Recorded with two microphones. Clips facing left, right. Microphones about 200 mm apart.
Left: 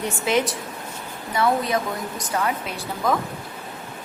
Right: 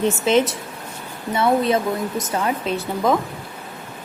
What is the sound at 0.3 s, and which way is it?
Speech, 25° right (ahead or behind).